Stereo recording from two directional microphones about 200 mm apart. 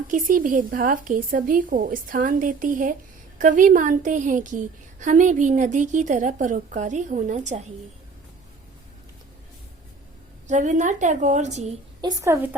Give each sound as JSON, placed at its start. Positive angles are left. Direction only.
{"t": 0.1, "sound": "a woman's voice", "side_deg": -40}
{"t": 10.4, "sound": "a woman's voice", "side_deg": -40}
{"t": 12.0, "sound": "a woman's voice", "side_deg": -15}